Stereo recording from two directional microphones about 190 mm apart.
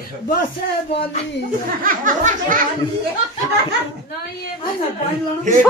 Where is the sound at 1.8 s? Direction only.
45° right (ahead or behind).